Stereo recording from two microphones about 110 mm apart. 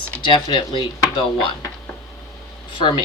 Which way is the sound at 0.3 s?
45° left (ahead or behind).